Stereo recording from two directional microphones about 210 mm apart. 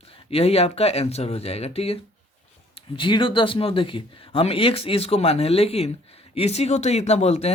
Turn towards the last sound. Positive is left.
turn(degrees=30)  # may be behind; listen again after turning